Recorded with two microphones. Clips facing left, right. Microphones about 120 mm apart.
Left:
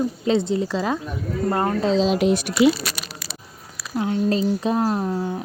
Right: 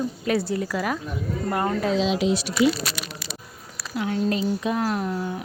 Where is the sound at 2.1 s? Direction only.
55° left (ahead or behind).